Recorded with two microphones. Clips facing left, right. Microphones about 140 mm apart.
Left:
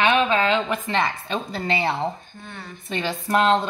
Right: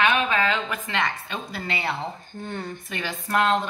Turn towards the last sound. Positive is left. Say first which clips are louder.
# left 3 dB
turn(degrees=25)  # may be behind; listen again after turning